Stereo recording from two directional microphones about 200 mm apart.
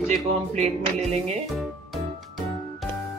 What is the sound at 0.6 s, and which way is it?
Music, 35° right (ahead or behind).